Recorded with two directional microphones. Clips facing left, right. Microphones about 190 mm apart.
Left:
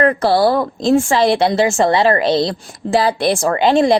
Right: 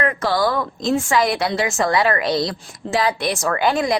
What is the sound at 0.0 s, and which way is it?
A woman's voice, 35° left (ahead or behind).